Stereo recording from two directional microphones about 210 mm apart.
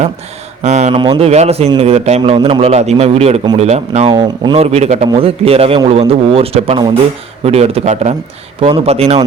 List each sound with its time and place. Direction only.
0.6 s a man's voice: 35° right (ahead or behind)